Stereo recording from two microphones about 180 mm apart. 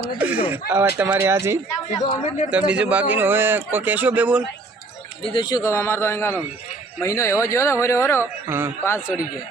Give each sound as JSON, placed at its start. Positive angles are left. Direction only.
{"t": 0.7, "sound": "speech", "side_deg": -10}
{"t": 2.0, "sound": "speech", "side_deg": 20}
{"t": 2.5, "sound": "speech", "side_deg": -5}
{"t": 5.2, "sound": "speech", "side_deg": 25}
{"t": 8.2, "sound": "speech", "side_deg": -15}
{"t": 8.8, "sound": "speech", "side_deg": 15}